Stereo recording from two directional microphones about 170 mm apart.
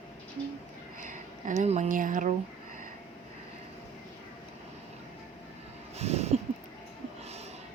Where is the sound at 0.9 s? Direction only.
50° right (ahead or behind).